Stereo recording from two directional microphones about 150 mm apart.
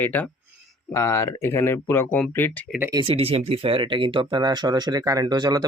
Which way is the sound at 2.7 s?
10° right (ahead or behind).